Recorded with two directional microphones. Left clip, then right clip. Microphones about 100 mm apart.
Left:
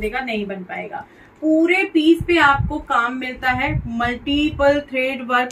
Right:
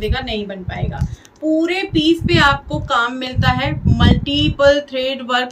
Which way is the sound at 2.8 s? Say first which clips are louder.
Right 2 dB; 15° right (ahead or behind).